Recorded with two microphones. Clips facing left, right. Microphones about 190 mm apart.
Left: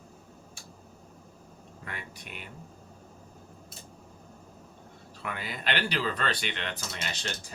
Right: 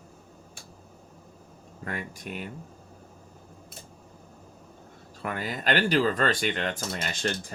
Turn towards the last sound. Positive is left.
turn(degrees=-50)  # may be behind; listen again after turning